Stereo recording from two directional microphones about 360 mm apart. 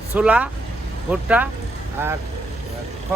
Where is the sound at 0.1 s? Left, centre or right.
Centre.